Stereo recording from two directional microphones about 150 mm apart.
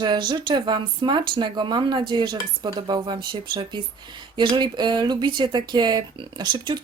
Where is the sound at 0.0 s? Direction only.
30° right (ahead or behind).